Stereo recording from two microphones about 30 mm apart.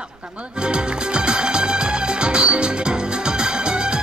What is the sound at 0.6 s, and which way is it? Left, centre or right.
Music, right.